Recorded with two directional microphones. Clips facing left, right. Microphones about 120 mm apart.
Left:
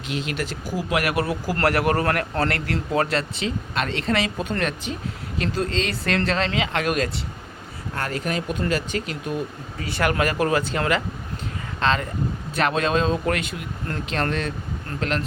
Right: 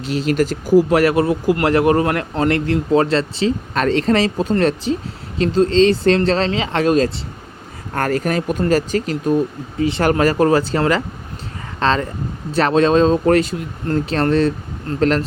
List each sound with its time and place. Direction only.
0.0 s speech: 35° right (ahead or behind)
7.9 s speech: 50° right (ahead or behind)
9.8 s speech: 25° right (ahead or behind)
10.1 s speech: 35° right (ahead or behind)